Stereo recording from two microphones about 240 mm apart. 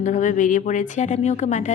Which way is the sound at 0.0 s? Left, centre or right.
Left.